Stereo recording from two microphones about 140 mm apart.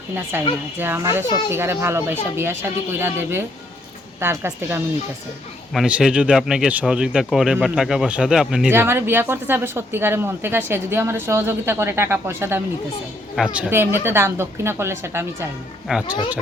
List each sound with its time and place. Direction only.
0.3 s a woman's voice: 15° right (ahead or behind)
5.7 s speech: 5° right (ahead or behind)
8.7 s a woman's voice: 15° right (ahead or behind)
15.9 s speech: 5° right (ahead or behind)